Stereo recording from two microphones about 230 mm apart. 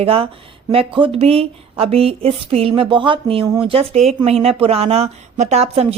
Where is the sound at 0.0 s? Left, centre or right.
Right.